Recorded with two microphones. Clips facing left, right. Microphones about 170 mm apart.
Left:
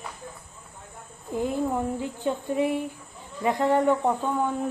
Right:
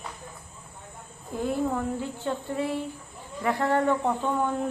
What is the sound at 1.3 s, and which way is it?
Speech, 15° left (ahead or behind).